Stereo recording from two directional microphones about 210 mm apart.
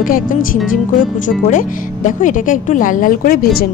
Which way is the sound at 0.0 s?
40° left (ahead or behind).